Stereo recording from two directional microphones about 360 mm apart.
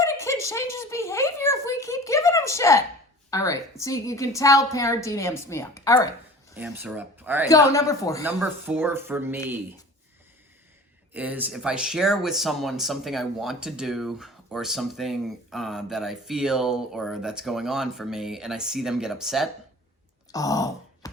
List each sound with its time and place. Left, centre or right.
0.0 s a woman's voice: centre
6.6 s speech: centre
7.4 s a woman's voice: centre
8.4 s speech: centre
11.1 s speech: centre
20.3 s a sound: centre